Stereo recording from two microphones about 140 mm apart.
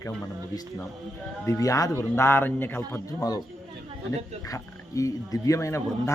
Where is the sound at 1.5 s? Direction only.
25° left (ahead or behind).